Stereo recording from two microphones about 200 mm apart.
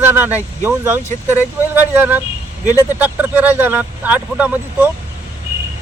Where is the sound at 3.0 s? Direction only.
10° right (ahead or behind).